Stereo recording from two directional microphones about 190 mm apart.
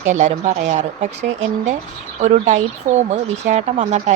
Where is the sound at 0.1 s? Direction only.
40° right (ahead or behind).